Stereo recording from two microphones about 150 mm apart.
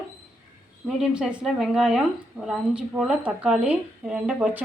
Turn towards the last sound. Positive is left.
turn(degrees=-5)  # may be behind; listen again after turning